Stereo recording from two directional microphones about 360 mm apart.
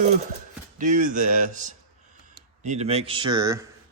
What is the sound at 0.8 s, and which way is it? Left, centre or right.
Speech, right.